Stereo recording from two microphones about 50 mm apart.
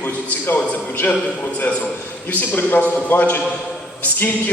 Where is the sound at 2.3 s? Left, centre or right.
Left.